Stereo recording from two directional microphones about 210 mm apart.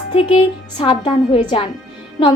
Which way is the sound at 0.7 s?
25° left (ahead or behind).